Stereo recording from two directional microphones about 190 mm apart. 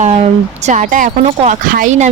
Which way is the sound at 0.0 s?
35° right (ahead or behind).